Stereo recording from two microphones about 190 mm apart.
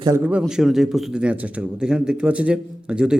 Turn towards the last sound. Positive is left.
turn(degrees=-5)  # may be behind; listen again after turning